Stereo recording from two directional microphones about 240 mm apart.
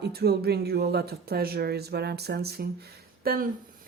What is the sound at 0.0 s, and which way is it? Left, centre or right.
Speech, right.